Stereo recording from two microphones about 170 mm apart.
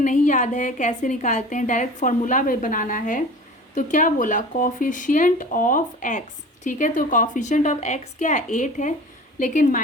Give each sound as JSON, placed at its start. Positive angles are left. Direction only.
{"t": 0.0, "sound": "a woman's voice", "side_deg": 50}